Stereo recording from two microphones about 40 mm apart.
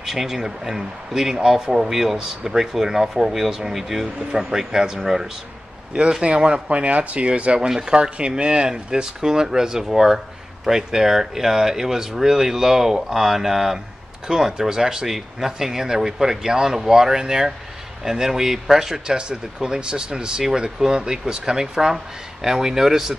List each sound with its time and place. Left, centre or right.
0.0 s speech: centre
6.2 s speech: right
6.8 s speech: right; by 18.9 s centre
19.0 s speech: right